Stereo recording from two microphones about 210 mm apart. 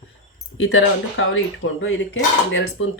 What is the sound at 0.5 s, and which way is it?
Speech, 70° left (ahead or behind).